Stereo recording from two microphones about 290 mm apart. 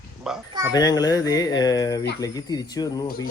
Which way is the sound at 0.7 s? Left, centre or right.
Centre.